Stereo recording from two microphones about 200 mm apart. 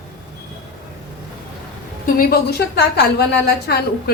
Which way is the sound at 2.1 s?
55° left (ahead or behind).